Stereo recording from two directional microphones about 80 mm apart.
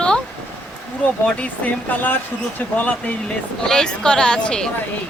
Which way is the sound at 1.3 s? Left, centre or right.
Centre.